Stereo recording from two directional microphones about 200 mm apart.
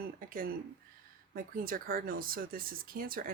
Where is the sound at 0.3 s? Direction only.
45° right (ahead or behind).